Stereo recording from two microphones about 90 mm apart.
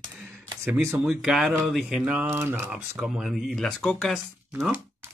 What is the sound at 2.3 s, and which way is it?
Speech, 25° right (ahead or behind).